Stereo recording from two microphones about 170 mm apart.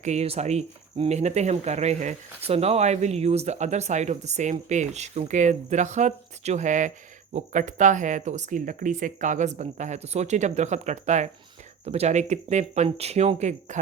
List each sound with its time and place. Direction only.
0.0 s speech: 40° right (ahead or behind)